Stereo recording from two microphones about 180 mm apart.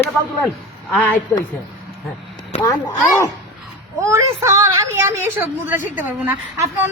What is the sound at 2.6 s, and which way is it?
Speech, 15° left (ahead or behind).